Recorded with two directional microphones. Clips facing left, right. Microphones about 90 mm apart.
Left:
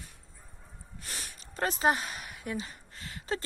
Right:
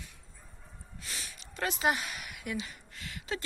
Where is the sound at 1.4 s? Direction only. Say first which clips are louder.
Left 3 dB; 40° left (ahead or behind).